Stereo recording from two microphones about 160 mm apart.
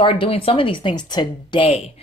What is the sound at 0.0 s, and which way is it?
Speech, 35° left (ahead or behind).